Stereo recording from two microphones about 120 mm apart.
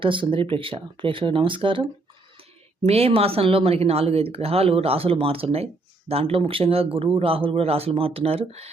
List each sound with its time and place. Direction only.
0.0 s speech: 45° right (ahead or behind)